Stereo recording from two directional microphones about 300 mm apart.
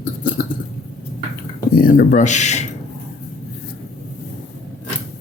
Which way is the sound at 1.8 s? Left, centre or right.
Left.